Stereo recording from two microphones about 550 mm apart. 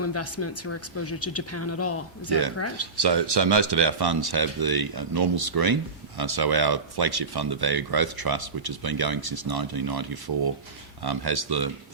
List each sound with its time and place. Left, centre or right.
0.0 s speech: left
3.0 s speech: right